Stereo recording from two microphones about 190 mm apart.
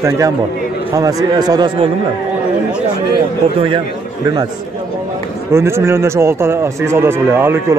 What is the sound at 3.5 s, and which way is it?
Speech, 25° right (ahead or behind).